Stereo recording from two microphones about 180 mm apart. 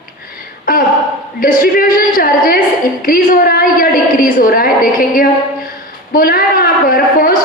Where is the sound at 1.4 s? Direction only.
50° left (ahead or behind).